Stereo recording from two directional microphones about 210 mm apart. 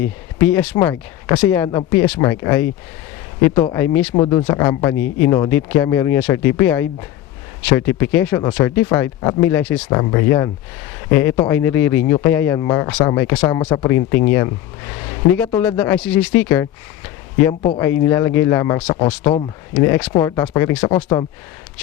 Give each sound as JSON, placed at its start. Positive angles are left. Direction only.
{"t": 0.0, "sound": "speech", "side_deg": 10}
{"t": 17.5, "sound": "speech", "side_deg": 25}
{"t": 17.7, "sound": "speech", "side_deg": 10}
{"t": 19.7, "sound": "speech", "side_deg": 10}